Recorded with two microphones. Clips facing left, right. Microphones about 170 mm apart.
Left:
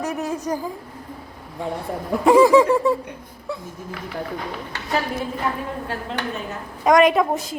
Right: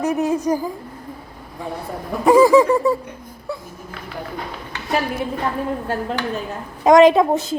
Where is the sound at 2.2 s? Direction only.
Centre (ahead or behind).